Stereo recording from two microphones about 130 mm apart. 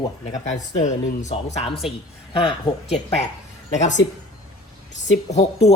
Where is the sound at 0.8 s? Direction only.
65° left (ahead or behind).